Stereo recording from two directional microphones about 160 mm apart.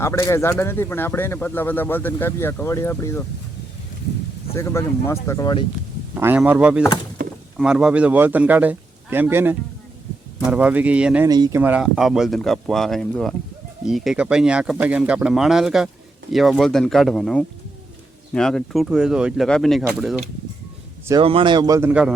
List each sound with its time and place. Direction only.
0.0 s speech: 15° left (ahead or behind)
4.5 s speech: 15° left (ahead or behind)
6.1 s a man's voice: 10° right (ahead or behind)
11.3 s speech: 25° right (ahead or behind)
11.6 s speech: 5° right (ahead or behind)
21.2 s speech: 35° right (ahead or behind)
21.8 s a man's voice: 10° right (ahead or behind)